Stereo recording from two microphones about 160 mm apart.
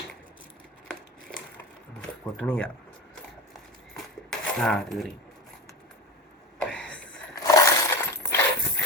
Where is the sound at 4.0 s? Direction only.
Centre (ahead or behind).